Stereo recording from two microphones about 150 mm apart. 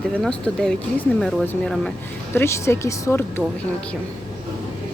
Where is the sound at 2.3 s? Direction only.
15° left (ahead or behind).